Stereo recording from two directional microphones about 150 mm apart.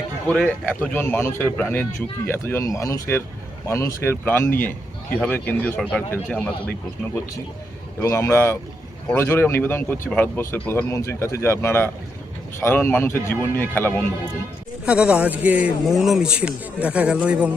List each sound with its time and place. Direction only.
0.3 s speech: 10° left (ahead or behind)
8.0 s speech: 20° left (ahead or behind)
14.8 s speech: 10° right (ahead or behind)